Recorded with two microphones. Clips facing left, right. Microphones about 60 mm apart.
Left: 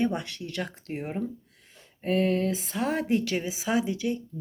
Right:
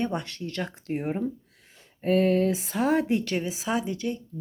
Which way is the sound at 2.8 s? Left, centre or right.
Centre.